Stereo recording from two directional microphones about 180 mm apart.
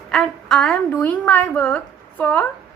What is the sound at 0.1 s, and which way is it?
A woman's voice, 5° left (ahead or behind).